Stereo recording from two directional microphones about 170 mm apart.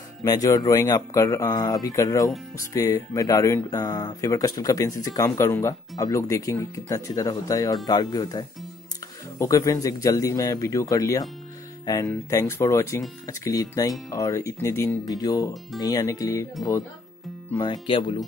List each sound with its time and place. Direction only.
0.2 s speech: 20° left (ahead or behind)
17.6 s speech: 30° left (ahead or behind)